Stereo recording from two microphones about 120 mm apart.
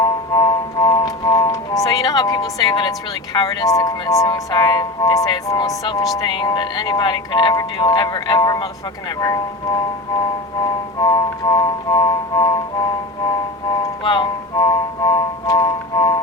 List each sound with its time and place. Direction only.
0.3 s music: 30° left (ahead or behind)
2.6 s speech: 30° left (ahead or behind)
14.0 s music: 40° left (ahead or behind)